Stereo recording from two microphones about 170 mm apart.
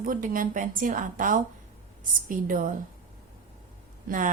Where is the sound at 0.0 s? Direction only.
50° right (ahead or behind).